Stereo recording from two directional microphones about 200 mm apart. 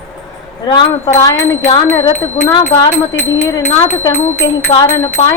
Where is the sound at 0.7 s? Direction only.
20° left (ahead or behind).